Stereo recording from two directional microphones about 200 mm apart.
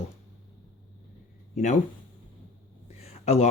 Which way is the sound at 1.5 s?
35° left (ahead or behind).